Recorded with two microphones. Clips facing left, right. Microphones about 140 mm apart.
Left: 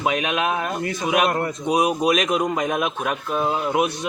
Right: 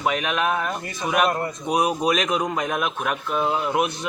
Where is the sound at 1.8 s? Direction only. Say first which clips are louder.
Left 2 dB; 5° left (ahead or behind).